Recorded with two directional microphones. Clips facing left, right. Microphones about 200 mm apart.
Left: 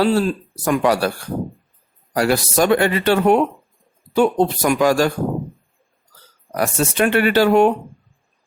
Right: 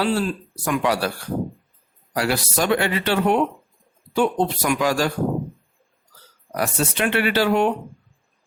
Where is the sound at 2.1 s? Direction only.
45° left (ahead or behind).